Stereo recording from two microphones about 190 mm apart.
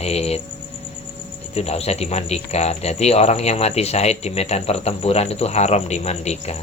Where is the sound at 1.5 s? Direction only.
35° left (ahead or behind).